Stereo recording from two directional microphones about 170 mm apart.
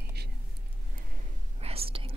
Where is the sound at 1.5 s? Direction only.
35° right (ahead or behind).